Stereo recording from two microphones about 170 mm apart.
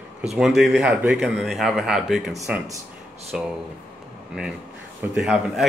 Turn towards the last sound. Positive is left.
turn(degrees=0)  # may be behind; listen again after turning